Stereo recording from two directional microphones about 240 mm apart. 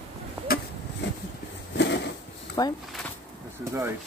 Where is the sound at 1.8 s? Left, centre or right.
Left.